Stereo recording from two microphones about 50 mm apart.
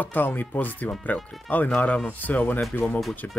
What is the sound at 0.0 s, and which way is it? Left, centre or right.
Speech, left.